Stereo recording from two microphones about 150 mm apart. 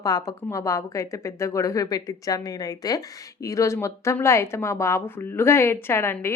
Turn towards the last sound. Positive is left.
turn(degrees=15)  # may be behind; listen again after turning